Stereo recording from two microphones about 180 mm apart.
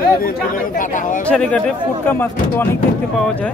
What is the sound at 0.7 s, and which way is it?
Speech, 45° left (ahead or behind).